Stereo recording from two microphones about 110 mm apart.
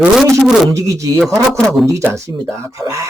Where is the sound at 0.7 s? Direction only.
30° right (ahead or behind).